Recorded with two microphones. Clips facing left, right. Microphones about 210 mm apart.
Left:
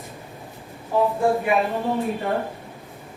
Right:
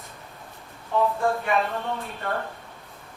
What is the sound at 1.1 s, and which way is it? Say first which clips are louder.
Speech: left 4 dB; 15° left (ahead or behind).